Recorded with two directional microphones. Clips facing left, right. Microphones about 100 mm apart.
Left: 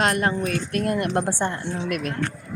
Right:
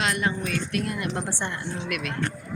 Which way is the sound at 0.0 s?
50° left (ahead or behind).